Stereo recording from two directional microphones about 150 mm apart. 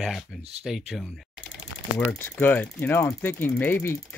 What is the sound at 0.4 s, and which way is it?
Speech, 45° right (ahead or behind).